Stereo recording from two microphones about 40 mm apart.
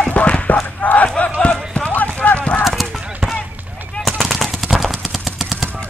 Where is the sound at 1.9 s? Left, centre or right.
Left.